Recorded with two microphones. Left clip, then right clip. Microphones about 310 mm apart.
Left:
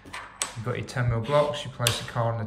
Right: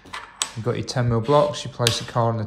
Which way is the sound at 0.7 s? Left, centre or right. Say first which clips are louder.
Right 5 dB; centre.